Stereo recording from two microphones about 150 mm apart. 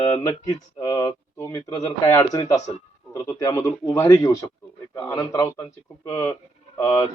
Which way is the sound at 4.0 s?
30° left (ahead or behind).